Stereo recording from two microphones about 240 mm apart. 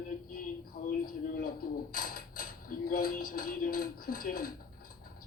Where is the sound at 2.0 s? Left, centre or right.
Left.